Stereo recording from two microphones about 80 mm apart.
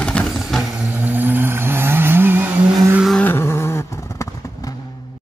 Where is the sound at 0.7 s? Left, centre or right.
Centre.